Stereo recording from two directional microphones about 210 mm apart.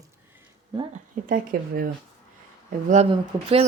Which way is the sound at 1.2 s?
45° right (ahead or behind).